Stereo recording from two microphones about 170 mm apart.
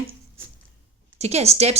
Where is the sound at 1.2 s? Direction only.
40° right (ahead or behind).